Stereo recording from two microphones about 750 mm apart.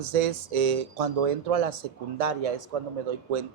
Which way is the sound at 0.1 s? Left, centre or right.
Right.